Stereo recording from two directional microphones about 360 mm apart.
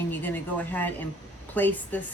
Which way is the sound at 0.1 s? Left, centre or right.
Centre.